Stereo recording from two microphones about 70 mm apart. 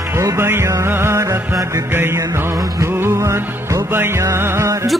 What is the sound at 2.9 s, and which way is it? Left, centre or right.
Music, right.